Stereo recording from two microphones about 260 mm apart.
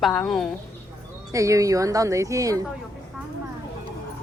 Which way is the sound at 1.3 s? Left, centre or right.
Centre.